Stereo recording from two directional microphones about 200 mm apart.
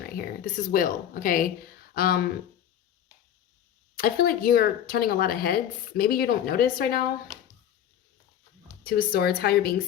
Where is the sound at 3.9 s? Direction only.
45° left (ahead or behind).